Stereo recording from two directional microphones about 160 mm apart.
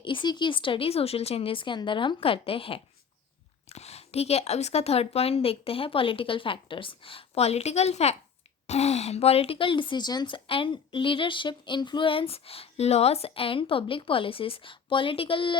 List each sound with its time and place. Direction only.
0.0 s a woman's voice: 30° left (ahead or behind)